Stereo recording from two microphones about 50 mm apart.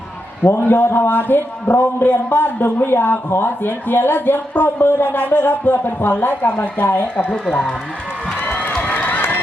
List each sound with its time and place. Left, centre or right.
0.4 s a man's voice: left
8.3 s crowd: left
8.9 s run: left